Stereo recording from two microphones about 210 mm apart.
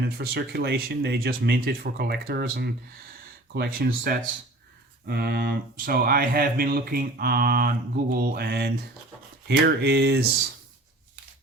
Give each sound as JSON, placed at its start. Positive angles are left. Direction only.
{"t": 0.0, "sound": "speech", "side_deg": -50}